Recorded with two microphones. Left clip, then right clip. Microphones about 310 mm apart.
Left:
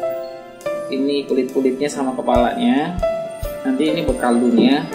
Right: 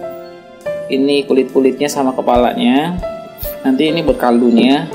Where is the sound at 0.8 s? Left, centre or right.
Right.